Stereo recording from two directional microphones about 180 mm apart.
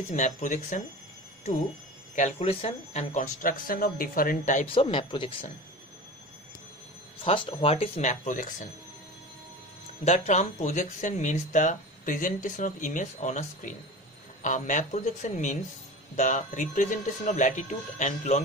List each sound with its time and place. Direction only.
0.1 s speech: 40° left (ahead or behind)
2.3 s speech: 35° left (ahead or behind)
4.6 s speech: 30° left (ahead or behind)
7.2 s speech: 30° left (ahead or behind)
10.0 s speech: 40° left (ahead or behind)